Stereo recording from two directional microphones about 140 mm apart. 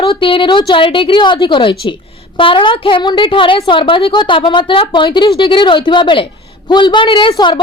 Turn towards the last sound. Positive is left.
turn(degrees=35)  # may be behind; listen again after turning